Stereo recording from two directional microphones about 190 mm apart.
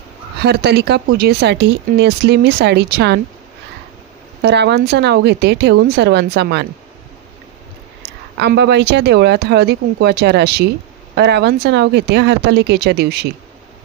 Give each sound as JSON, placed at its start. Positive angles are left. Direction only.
{"t": 0.4, "sound": "speech", "side_deg": -60}
{"t": 4.4, "sound": "speech", "side_deg": -60}
{"t": 8.4, "sound": "speech", "side_deg": -60}